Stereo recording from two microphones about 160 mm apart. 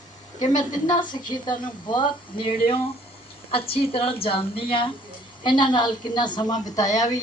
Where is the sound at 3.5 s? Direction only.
35° left (ahead or behind).